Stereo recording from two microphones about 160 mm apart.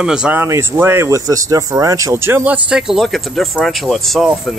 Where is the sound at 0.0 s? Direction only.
5° right (ahead or behind).